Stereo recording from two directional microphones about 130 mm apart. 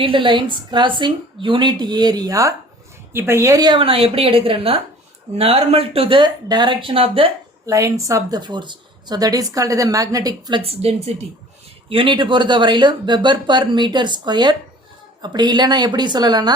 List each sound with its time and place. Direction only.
0.0 s speech: 40° right (ahead or behind); by 3.7 s 25° right (ahead or behind)
3.7 s speech: 45° right (ahead or behind)
7.7 s speech: 25° right (ahead or behind)
10.6 s speech: 50° right (ahead or behind)
11.9 s speech: 40° right (ahead or behind)